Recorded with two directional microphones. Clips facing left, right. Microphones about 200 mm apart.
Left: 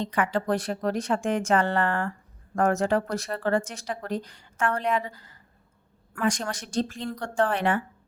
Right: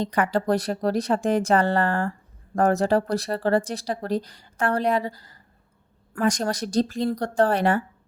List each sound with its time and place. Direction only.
0.0 s speech: 40° right (ahead or behind)